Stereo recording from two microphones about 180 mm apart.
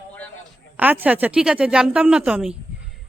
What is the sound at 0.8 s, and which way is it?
Speech, 10° right (ahead or behind).